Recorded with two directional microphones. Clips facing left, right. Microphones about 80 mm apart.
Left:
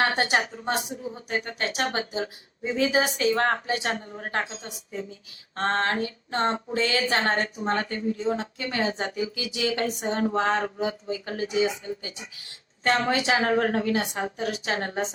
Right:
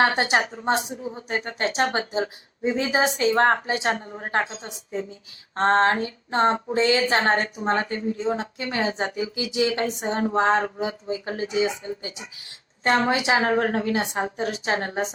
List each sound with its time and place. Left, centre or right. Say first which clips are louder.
0.0 s a woman's voice: right 3 dB; right